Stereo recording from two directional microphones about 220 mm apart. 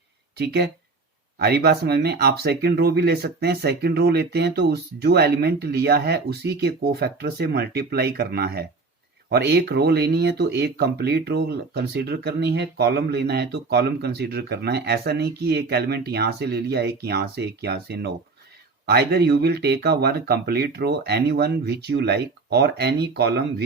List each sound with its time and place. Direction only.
0.3 s speech: 45° right (ahead or behind)